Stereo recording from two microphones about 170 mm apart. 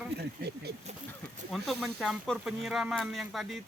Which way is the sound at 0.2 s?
75° right (ahead or behind).